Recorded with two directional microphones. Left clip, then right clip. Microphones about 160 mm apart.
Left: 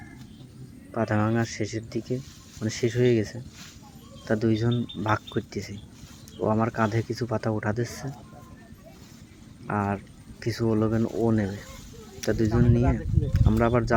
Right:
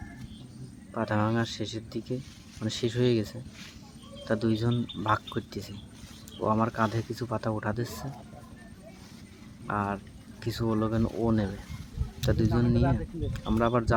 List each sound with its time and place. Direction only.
0.9 s speech: 15° left (ahead or behind)
4.3 s speech: 15° left (ahead or behind)
9.6 s speech: 15° left (ahead or behind)
12.2 s speech: 15° left (ahead or behind)